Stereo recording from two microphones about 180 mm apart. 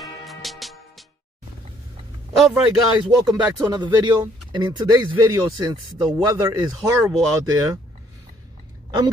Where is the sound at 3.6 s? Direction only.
25° right (ahead or behind).